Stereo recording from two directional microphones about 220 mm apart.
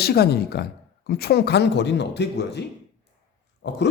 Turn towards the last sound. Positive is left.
turn(degrees=50)  # may be behind; listen again after turning